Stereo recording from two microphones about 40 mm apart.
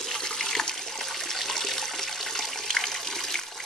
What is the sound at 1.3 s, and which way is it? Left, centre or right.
Toilet flush, centre.